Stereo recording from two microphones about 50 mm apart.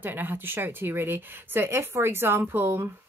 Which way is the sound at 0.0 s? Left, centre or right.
Right.